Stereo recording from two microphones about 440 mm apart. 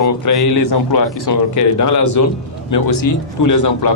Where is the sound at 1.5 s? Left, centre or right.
Left.